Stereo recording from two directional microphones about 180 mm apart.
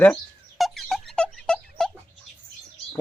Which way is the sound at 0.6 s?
Centre (ahead or behind).